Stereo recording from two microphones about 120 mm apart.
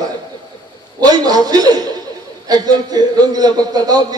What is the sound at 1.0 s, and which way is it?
Speech, 30° right (ahead or behind).